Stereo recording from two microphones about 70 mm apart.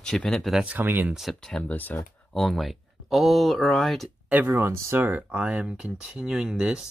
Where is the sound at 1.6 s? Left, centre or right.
Left.